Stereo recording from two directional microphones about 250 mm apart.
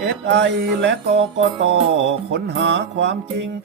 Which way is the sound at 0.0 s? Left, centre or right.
Right.